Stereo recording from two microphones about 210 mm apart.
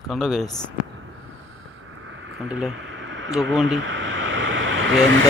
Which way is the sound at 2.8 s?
65° right (ahead or behind).